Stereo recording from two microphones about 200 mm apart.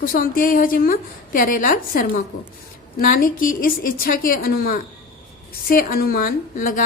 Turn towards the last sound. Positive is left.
turn(degrees=45)  # may be behind; listen again after turning